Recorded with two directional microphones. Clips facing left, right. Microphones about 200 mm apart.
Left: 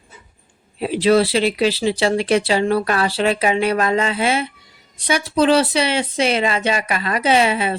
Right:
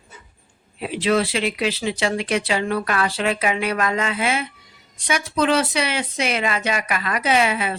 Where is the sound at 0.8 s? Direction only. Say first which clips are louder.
Left 5 dB; 35° left (ahead or behind).